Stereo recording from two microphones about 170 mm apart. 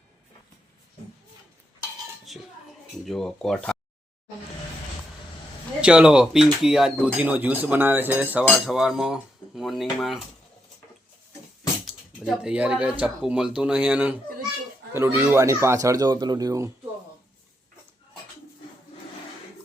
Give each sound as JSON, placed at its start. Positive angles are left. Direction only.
{"t": 2.3, "sound": "dishes", "side_deg": 0}
{"t": 3.1, "sound": "speech", "side_deg": 5}
{"t": 5.8, "sound": "speech", "side_deg": -5}
{"t": 11.9, "sound": "speech", "side_deg": -5}